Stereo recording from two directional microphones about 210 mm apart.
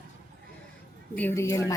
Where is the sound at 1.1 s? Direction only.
10° left (ahead or behind).